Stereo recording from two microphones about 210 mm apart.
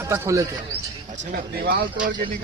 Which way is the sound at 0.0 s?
15° right (ahead or behind).